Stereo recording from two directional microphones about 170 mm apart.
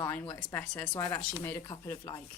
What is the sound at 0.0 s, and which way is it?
Speech, 10° left (ahead or behind).